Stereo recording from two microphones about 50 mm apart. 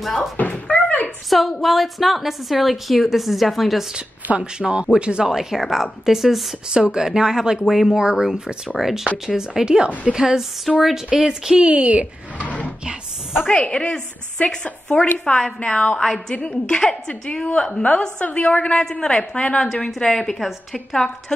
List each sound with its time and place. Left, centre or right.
0.0 s a woman's voice: centre
0.7 s door: left
1.6 s a woman's voice: centre
4.4 s a woman's voice: centre
10.1 s speech: centre
10.7 s a woman's voice: centre
11.1 s speech: centre
13.6 s a woman's voice: centre
16.0 s a woman's voice: centre
20.0 s a woman's voice: centre